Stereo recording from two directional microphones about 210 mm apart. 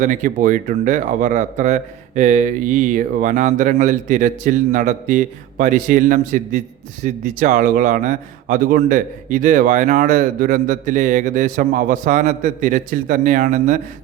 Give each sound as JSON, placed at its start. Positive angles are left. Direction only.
{"t": 0.0, "sound": "a man's voice", "side_deg": -35}